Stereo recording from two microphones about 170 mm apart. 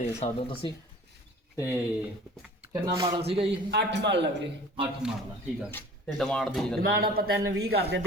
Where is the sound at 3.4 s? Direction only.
90° right.